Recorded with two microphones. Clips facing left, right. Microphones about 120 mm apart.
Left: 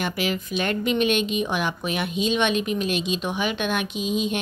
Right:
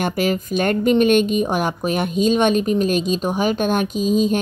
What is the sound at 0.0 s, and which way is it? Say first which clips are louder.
A woman's voice: right 6 dB; 45° right (ahead or behind).